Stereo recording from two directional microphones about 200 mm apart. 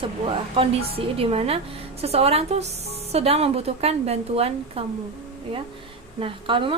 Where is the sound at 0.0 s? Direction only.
25° right (ahead or behind).